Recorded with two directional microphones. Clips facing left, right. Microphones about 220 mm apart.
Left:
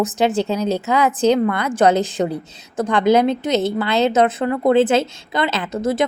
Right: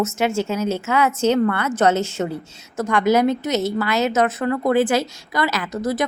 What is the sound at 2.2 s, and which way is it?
A woman's voice, 35° left (ahead or behind).